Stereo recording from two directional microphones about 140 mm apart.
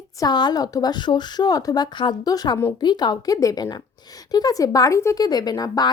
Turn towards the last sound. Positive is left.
turn(degrees=30)  # may be behind; listen again after turning